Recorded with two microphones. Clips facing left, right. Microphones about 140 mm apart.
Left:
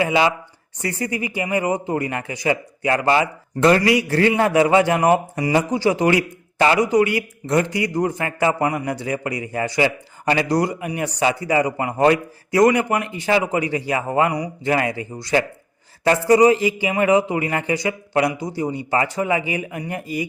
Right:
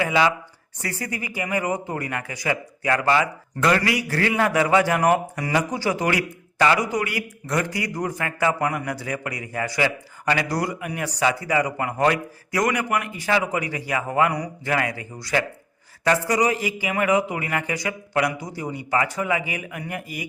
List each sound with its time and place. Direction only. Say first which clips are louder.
0.0 s speech: left 2 dB; 25° left (ahead or behind)